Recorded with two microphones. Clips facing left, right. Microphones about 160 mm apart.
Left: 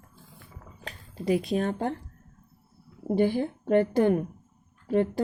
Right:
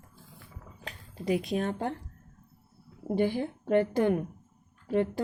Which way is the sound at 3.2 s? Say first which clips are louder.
Left 3 dB; 35° left (ahead or behind).